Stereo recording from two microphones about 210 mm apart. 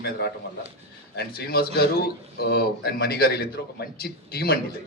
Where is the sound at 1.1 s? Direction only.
50° left (ahead or behind).